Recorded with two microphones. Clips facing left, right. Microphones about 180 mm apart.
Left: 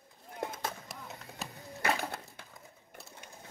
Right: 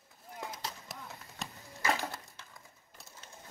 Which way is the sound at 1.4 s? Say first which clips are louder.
Even; centre (ahead or behind).